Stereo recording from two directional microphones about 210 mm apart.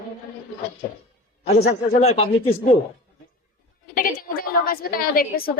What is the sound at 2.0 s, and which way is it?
Speech, 30° left (ahead or behind).